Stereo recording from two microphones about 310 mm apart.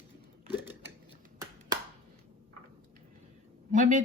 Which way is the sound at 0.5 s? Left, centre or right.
Centre.